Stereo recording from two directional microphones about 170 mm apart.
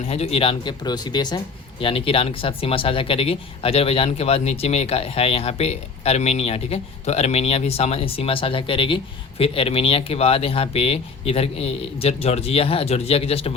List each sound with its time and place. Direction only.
0.1 s speech: 35° left (ahead or behind)